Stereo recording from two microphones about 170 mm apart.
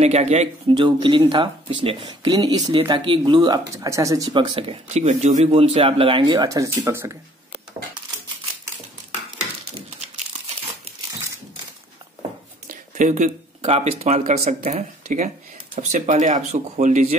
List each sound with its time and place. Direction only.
0.0 s speech: 40° right (ahead or behind)
5.0 s speech: 45° right (ahead or behind); by 7.2 s 15° right (ahead or behind)
12.6 s speech: 50° right (ahead or behind)